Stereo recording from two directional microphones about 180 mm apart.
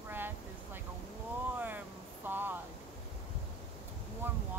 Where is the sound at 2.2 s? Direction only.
10° right (ahead or behind).